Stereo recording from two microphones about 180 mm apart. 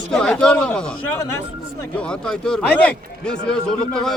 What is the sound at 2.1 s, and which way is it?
A man's voice, 5° left (ahead or behind).